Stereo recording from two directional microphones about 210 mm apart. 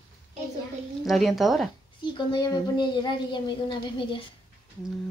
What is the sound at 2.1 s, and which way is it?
Speech, 20° left (ahead or behind).